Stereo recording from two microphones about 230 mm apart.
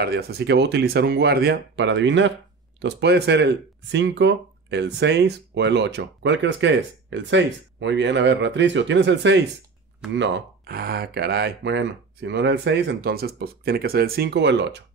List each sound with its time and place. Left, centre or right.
0.0 s speech: right